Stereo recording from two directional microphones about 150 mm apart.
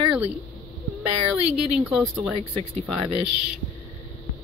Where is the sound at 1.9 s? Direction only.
10° right (ahead or behind).